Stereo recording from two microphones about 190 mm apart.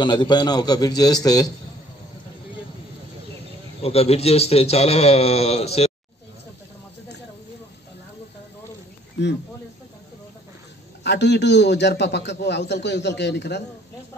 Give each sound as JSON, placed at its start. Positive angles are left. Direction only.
{"t": 0.0, "sound": "a man's voice", "side_deg": 25}
{"t": 3.8, "sound": "a man's voice", "side_deg": 30}
{"t": 9.2, "sound": "a man's voice", "side_deg": 65}
{"t": 11.1, "sound": "a man's voice", "side_deg": 65}